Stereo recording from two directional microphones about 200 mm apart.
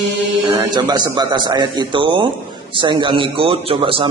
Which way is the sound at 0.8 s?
20° right (ahead or behind).